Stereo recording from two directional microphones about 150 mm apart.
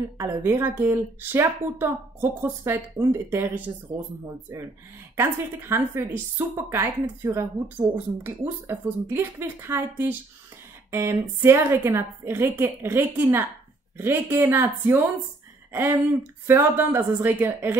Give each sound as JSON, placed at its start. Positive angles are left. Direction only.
{"t": 0.2, "sound": "a woman's voice", "side_deg": -20}
{"t": 5.1, "sound": "a woman's voice", "side_deg": -15}
{"t": 16.4, "sound": "a woman's voice", "side_deg": -15}